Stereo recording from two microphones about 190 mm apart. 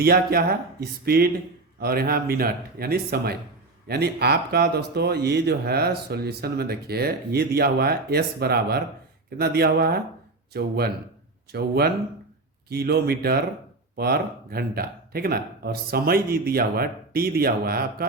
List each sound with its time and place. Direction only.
0.0 s speech: 55° right (ahead or behind)